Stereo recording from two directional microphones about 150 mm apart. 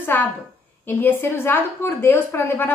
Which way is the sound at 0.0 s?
15° left (ahead or behind).